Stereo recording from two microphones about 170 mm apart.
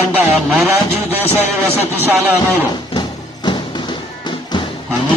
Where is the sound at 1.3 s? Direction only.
15° right (ahead or behind).